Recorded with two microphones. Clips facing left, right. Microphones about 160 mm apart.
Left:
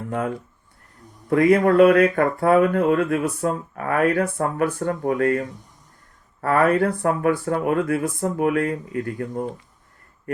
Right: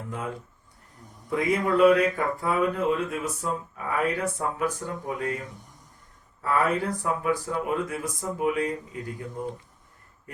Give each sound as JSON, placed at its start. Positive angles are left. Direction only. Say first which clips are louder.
{"t": 1.3, "sound": "speech", "louder": "left 8 dB", "side_deg": 60}